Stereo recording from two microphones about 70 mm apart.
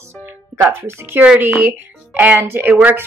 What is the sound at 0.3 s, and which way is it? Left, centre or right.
Speech, right.